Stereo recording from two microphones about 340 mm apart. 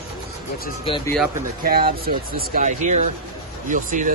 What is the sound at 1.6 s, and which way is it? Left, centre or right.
Speech, right.